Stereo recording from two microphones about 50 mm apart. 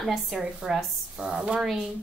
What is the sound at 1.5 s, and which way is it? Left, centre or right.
Speech, centre.